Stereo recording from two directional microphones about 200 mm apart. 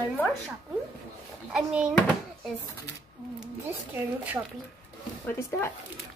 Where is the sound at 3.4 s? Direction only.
10° right (ahead or behind).